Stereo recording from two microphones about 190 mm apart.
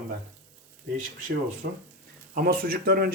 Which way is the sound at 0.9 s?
45° right (ahead or behind).